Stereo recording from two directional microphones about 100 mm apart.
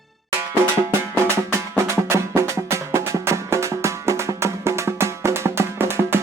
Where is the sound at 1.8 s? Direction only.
30° right (ahead or behind).